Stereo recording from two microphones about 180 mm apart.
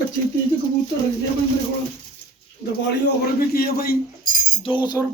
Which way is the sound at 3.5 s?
60° left (ahead or behind).